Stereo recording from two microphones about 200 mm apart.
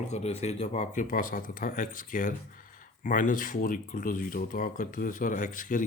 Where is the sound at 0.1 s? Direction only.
35° left (ahead or behind).